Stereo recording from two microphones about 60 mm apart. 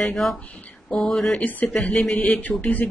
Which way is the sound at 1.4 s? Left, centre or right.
Left.